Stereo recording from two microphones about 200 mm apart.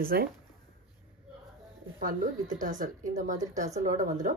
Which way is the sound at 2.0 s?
40° right (ahead or behind).